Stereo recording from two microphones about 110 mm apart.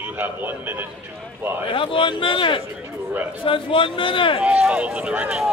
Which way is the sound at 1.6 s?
50° left (ahead or behind).